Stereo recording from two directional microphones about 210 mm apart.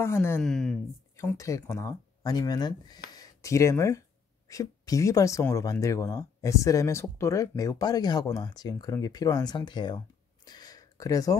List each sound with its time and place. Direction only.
0.0 s speech: 10° left (ahead or behind)
1.1 s speech: 15° left (ahead or behind)